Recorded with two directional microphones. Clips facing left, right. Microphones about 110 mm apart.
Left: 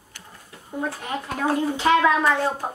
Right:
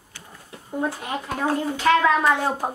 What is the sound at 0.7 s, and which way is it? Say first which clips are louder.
Speech: right 2 dB; 5° right (ahead or behind).